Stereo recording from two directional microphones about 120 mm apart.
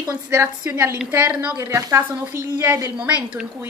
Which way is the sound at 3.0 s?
10° right (ahead or behind).